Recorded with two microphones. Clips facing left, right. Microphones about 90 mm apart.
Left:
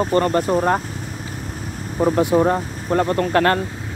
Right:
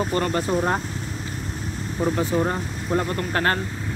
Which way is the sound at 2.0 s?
60° left (ahead or behind).